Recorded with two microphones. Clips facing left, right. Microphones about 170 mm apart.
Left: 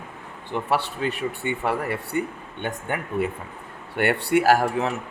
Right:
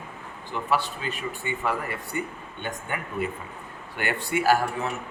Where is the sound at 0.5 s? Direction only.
60° left (ahead or behind); by 4.9 s 80° left.